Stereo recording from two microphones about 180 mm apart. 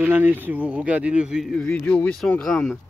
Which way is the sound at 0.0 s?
10° right (ahead or behind).